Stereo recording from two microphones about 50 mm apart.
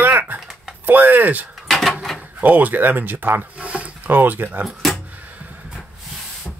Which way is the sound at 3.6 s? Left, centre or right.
Right.